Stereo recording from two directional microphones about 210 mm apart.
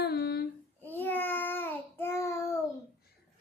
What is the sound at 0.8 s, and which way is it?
Babbling, 10° left (ahead or behind).